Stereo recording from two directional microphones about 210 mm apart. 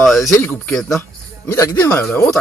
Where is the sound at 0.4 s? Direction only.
10° left (ahead or behind).